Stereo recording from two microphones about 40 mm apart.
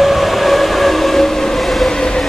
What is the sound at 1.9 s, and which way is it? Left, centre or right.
Train, centre.